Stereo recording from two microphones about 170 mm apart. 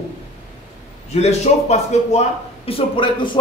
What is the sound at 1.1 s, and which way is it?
A man's voice, 40° left (ahead or behind).